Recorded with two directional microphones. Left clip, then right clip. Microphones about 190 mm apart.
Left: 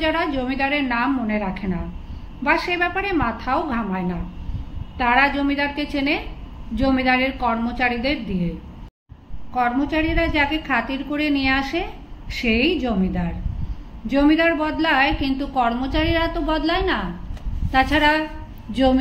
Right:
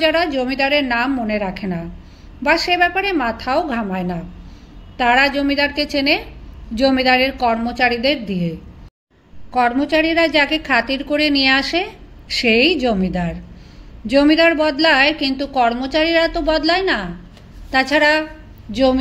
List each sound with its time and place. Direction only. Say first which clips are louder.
0.0 s a woman's voice: right 5 dB; 45° right (ahead or behind)
9.5 s a woman's voice: right 5 dB; 45° right (ahead or behind); by 18.9 s 25° right (ahead or behind)